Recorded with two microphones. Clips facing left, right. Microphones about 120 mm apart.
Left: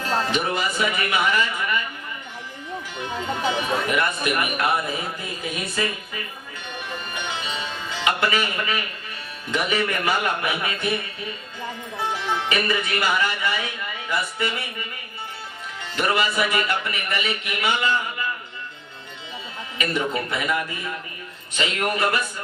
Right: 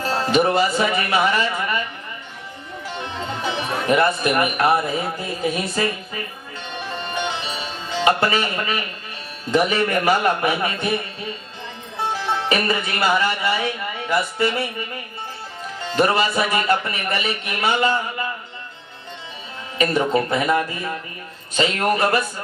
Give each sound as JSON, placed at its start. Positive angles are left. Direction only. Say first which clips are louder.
{"t": 0.0, "sound": "speech", "louder": "right 5 dB", "side_deg": -35}
{"t": 3.8, "sound": "speech", "louder": "right 5 dB", "side_deg": -35}
{"t": 7.1, "sound": "music", "louder": "right 6 dB", "side_deg": -40}
{"t": 7.9, "sound": "speech", "louder": "right 5 dB", "side_deg": -35}
{"t": 12.1, "sound": "speech", "louder": "right 3 dB", "side_deg": -35}
{"t": 15.9, "sound": "speech", "louder": "right 4 dB", "side_deg": -35}
{"t": 19.8, "sound": "speech", "louder": "right 6 dB", "side_deg": -35}